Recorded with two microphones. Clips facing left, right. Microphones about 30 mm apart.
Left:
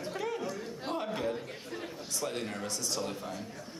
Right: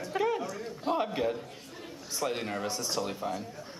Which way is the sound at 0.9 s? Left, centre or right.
Right.